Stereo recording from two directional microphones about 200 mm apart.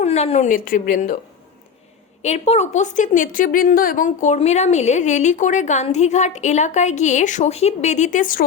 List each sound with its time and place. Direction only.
0.0 s a woman's voice: 35° left (ahead or behind)
2.2 s a woman's voice: 35° left (ahead or behind)